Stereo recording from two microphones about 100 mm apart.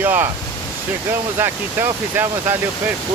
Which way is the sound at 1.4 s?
25° right (ahead or behind).